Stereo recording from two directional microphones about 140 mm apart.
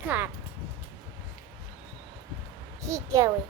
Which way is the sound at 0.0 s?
10° right (ahead or behind).